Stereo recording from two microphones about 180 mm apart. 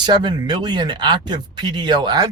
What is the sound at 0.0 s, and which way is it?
Speech, 25° right (ahead or behind).